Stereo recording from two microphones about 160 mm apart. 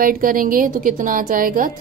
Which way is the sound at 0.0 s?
60° right (ahead or behind).